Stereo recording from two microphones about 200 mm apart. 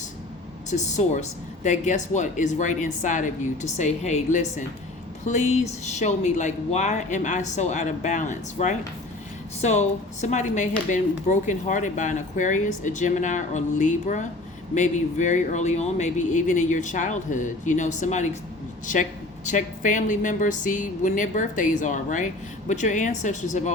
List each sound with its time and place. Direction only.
0.7 s speech: 35° left (ahead or behind)
19.5 s speech: 40° left (ahead or behind)